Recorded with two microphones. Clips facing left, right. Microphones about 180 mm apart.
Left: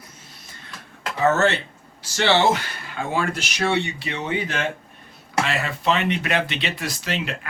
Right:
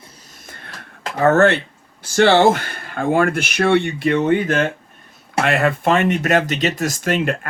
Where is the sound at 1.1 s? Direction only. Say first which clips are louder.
Right 6 dB; 55° right (ahead or behind).